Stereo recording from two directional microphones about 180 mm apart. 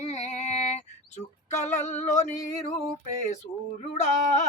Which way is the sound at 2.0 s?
40° left (ahead or behind).